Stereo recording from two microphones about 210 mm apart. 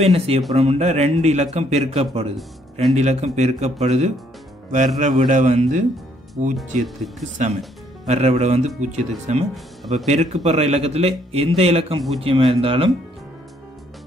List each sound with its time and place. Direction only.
0.0 s a man's voice: 30° right (ahead or behind)
6.8 s speech: centre (ahead or behind)
8.1 s a man's voice: 30° right (ahead or behind)